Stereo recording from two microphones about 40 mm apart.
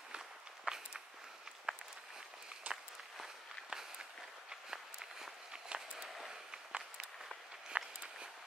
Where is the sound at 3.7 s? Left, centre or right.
Centre.